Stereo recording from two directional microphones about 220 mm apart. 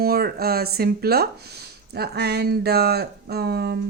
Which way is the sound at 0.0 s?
45° right (ahead or behind).